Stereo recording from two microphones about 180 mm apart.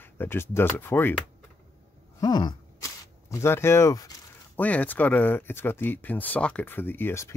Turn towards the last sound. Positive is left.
turn(degrees=15)  # may be behind; listen again after turning